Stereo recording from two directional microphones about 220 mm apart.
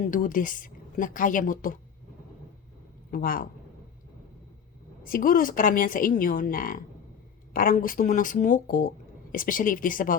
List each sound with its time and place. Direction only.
0.0 s a woman's voice: 35° left (ahead or behind)
3.1 s a woman's voice: 40° left (ahead or behind)
5.0 s a woman's voice: 40° left (ahead or behind)